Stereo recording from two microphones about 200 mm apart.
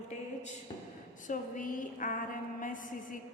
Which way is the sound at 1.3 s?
40° left (ahead or behind).